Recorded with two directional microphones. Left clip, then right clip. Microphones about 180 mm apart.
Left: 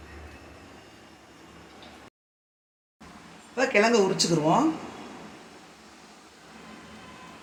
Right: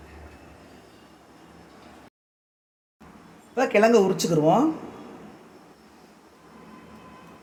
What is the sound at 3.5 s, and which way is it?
Speech, 65° right (ahead or behind).